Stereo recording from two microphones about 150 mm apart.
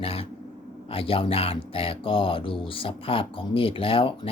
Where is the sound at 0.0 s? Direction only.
40° left (ahead or behind).